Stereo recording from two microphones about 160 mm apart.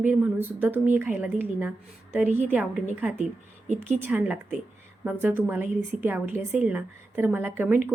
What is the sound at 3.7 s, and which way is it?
Speech, 45° right (ahead or behind).